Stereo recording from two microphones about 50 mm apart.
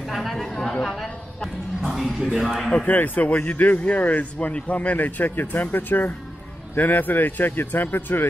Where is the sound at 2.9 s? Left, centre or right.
Left.